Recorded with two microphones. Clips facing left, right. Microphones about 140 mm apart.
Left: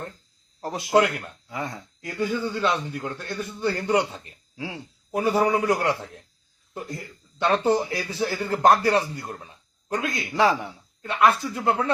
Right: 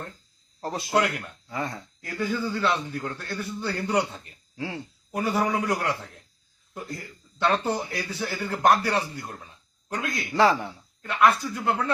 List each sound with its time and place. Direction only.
0.6 s a man's voice: 15° left (ahead or behind)
0.9 s a man's voice: 25° left (ahead or behind)
1.5 s a man's voice: 10° left (ahead or behind)
5.1 s a man's voice: 25° left (ahead or behind)
9.5 s a sound: 20° left (ahead or behind)
10.3 s a man's voice: 10° left (ahead or behind)